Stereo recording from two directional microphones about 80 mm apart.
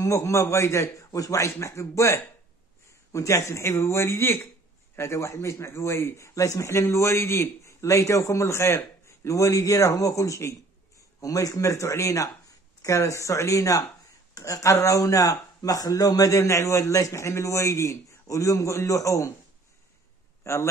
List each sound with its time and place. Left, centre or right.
0.0 s a man's voice: left
20.4 s a man's voice: left